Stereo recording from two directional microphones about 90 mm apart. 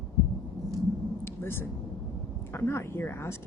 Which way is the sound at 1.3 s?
25° left (ahead or behind).